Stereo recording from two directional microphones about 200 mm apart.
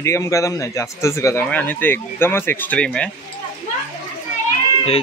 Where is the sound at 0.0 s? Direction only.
15° left (ahead or behind).